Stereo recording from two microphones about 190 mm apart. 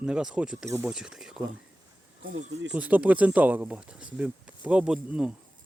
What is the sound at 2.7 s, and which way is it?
Speech, 10° right (ahead or behind).